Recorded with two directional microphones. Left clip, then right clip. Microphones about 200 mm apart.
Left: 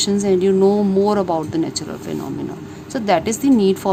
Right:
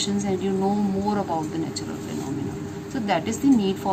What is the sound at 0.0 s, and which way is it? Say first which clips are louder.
Speech: left 10 dB; 55° left (ahead or behind).